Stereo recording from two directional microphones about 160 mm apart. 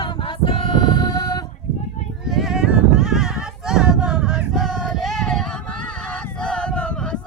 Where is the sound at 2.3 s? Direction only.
Centre (ahead or behind).